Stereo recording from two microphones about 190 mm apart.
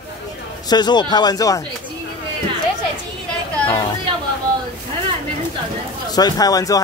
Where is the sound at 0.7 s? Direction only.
20° left (ahead or behind).